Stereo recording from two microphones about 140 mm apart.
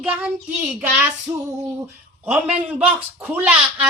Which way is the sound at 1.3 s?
30° right (ahead or behind).